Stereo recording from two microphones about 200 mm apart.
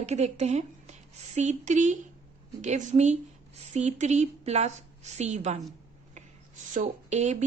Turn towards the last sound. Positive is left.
turn(degrees=-35)  # may be behind; listen again after turning